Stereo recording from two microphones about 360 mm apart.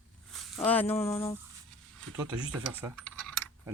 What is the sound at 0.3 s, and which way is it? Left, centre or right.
Speech, centre.